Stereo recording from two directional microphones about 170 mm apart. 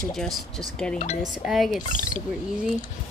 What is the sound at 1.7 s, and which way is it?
Speech, 50° left (ahead or behind).